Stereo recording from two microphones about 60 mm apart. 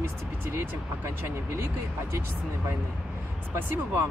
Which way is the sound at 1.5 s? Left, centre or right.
Right.